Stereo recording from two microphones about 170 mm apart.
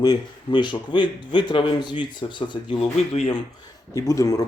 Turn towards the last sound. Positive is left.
turn(degrees=20)  # may be behind; listen again after turning